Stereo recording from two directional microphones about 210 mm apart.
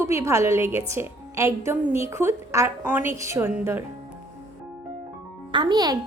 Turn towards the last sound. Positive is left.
turn(degrees=-20)  # may be behind; listen again after turning